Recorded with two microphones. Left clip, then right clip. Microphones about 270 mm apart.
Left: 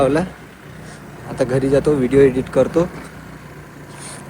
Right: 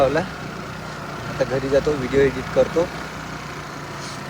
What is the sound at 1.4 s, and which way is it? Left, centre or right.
Speech, left.